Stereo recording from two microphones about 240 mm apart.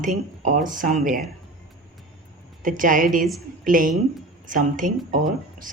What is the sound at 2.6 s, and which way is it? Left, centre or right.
A woman's voice, right.